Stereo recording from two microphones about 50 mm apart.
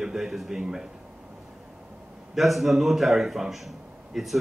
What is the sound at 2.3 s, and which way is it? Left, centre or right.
A man's voice, centre.